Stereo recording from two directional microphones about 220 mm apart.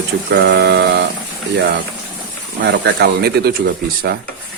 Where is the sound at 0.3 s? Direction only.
50° right (ahead or behind).